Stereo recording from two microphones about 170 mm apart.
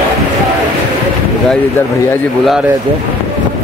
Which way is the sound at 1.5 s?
10° left (ahead or behind).